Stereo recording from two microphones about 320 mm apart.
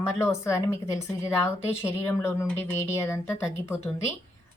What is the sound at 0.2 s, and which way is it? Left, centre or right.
A woman's voice, centre.